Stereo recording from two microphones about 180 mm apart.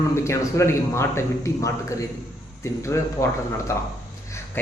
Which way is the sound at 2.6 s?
15° left (ahead or behind).